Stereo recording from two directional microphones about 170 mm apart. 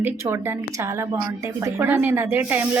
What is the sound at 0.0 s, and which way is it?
Speech, 15° right (ahead or behind).